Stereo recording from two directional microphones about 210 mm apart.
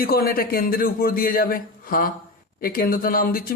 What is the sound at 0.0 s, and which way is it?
Speech, 45° left (ahead or behind).